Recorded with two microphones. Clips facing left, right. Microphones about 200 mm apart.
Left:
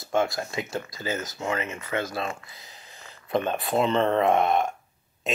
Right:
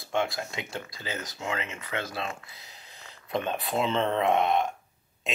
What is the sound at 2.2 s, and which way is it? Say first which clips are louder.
Speech: left 4 dB; centre (ahead or behind).